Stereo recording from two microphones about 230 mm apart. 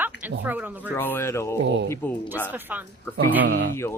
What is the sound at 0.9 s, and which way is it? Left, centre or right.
Speech, centre.